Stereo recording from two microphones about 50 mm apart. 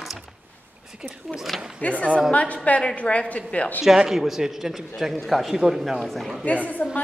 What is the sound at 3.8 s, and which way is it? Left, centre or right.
Speech, centre.